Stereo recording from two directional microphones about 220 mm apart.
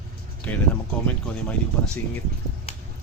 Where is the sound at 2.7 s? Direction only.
25° left (ahead or behind).